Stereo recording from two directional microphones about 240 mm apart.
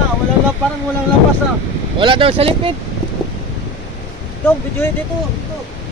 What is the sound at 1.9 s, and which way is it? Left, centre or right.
Speech, right.